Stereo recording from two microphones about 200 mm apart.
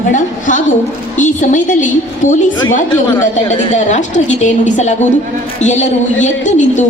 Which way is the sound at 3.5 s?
35° left (ahead or behind).